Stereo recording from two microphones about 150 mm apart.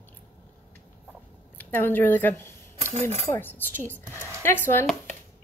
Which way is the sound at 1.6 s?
10° left (ahead or behind).